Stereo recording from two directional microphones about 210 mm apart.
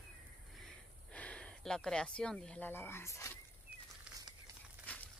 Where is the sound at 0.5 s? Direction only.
5° left (ahead or behind).